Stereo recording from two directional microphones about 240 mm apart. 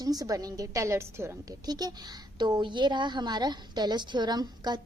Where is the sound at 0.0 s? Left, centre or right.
Centre.